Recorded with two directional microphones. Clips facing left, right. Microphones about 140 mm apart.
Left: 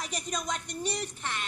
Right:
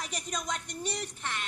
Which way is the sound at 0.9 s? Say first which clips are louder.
Left 2 dB; 30° left (ahead or behind).